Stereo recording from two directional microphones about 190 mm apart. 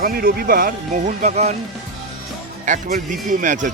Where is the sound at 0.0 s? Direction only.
50° right (ahead or behind).